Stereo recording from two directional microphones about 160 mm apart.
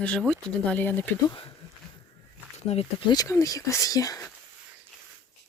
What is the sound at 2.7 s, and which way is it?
Speech, 40° left (ahead or behind).